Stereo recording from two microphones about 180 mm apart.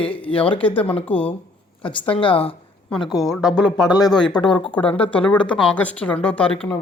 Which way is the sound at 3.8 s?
20° left (ahead or behind).